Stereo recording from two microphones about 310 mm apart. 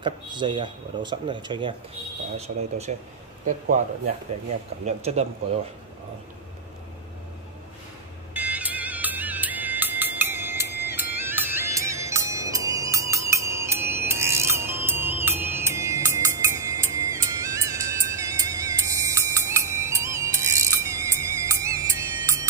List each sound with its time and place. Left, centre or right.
0.0 s speech: centre
4.8 s speech: right
8.3 s music: centre